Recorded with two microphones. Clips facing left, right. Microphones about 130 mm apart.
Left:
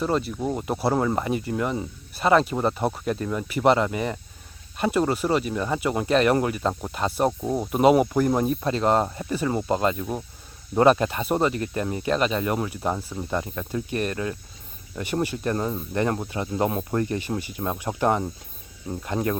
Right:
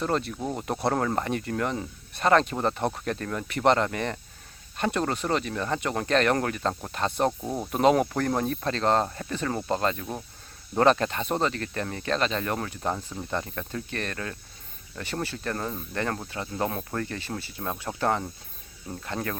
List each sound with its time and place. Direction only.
0.0 s speech: 5° left (ahead or behind)